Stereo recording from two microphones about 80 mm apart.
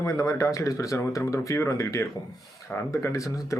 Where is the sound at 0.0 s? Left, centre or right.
Left.